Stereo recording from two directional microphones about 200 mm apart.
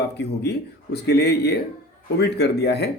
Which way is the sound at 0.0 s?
55° left (ahead or behind).